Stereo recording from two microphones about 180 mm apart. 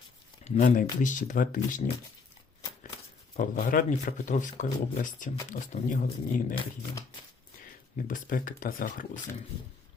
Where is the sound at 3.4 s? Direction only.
50° left (ahead or behind).